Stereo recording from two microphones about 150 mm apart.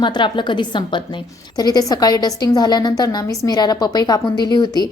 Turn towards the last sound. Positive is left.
turn(degrees=25)  # may be behind; listen again after turning